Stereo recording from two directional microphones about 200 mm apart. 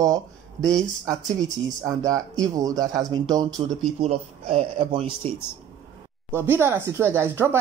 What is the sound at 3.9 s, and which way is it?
A man's voice, 30° right (ahead or behind).